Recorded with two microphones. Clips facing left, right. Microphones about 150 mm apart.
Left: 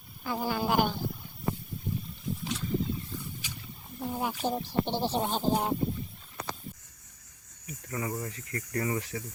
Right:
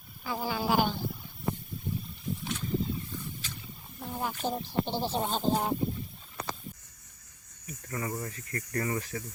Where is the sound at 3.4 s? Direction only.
15° left (ahead or behind).